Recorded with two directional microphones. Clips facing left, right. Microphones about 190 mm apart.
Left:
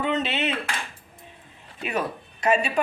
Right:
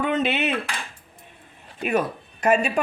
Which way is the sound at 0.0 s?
55° right (ahead or behind).